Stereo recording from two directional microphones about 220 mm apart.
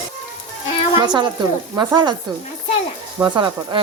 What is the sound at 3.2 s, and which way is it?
Speech, 20° right (ahead or behind).